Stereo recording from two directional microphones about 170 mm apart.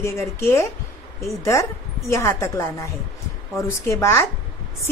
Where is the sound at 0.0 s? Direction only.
15° left (ahead or behind).